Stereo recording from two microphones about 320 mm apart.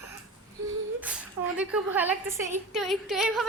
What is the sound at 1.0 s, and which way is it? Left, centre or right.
A woman's voice, centre.